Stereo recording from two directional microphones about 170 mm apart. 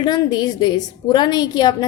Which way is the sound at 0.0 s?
25° left (ahead or behind).